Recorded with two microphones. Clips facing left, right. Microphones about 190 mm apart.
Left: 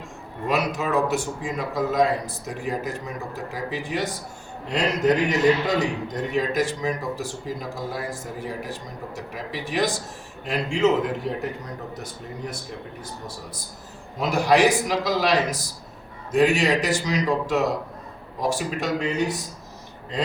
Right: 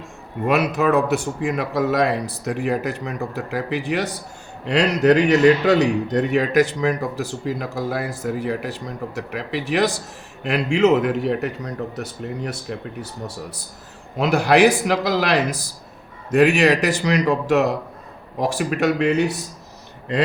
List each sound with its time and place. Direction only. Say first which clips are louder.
0.4 s a man's voice: right 6 dB; 60° right (ahead or behind)